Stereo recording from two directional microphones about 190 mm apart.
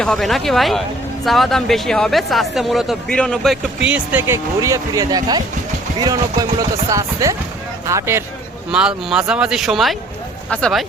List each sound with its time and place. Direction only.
0.0 s speech: centre (ahead or behind); by 5.4 s 20° right (ahead or behind)
6.6 s speech: 15° right (ahead or behind)
8.7 s speech: 5° right (ahead or behind)